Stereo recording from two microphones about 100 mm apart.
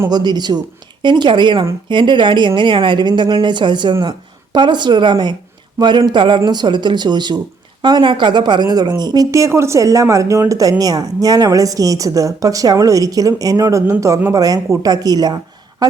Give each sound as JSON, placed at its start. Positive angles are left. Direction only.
{"t": 0.1, "sound": "speech", "side_deg": -45}
{"t": 9.3, "sound": "speech", "side_deg": -30}